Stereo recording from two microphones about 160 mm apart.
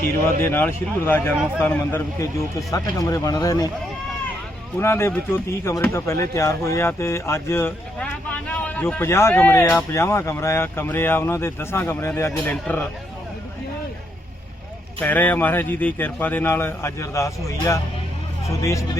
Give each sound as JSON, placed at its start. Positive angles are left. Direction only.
{"t": 0.4, "sound": "speech", "side_deg": 15}
{"t": 4.8, "sound": "speech", "side_deg": 15}
{"t": 15.0, "sound": "speech", "side_deg": 10}